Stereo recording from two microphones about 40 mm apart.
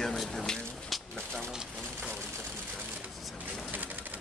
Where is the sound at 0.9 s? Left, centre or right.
Centre.